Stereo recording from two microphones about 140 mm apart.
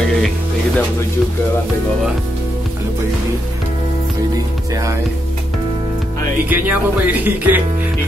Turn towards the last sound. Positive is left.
turn(degrees=-10)  # may be behind; listen again after turning